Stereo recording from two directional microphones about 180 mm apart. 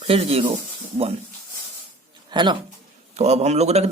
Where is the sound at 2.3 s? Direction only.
25° right (ahead or behind).